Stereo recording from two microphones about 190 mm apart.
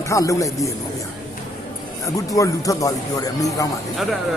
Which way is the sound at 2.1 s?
15° left (ahead or behind).